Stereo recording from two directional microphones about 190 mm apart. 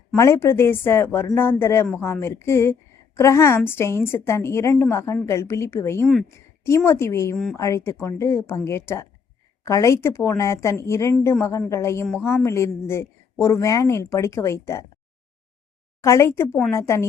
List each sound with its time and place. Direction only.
0.2 s a woman's voice: 15° left (ahead or behind)
16.0 s a woman's voice: 15° left (ahead or behind)